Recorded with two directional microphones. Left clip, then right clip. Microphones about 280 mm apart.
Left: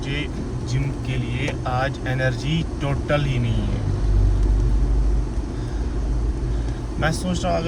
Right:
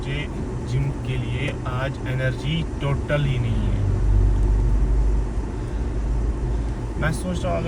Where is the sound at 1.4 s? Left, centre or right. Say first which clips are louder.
Left 5 dB; left.